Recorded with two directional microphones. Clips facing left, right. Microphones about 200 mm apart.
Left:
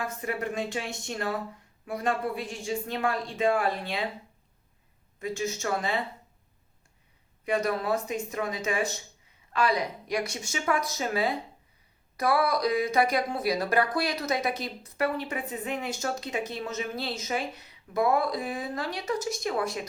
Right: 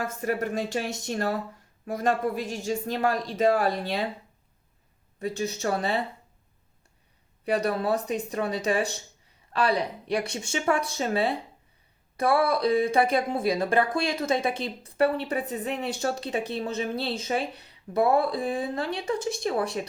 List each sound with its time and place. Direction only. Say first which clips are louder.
0.0 s speech: right 4 dB; 45° right (ahead or behind)
5.2 s speech: right 2 dB; 35° right (ahead or behind)
7.4 s speech: right 2 dB; 35° right (ahead or behind)